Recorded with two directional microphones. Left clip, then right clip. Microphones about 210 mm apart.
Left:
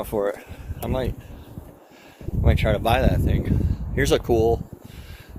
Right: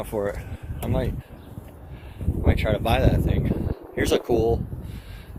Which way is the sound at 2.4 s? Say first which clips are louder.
Left 2 dB; 25° left (ahead or behind).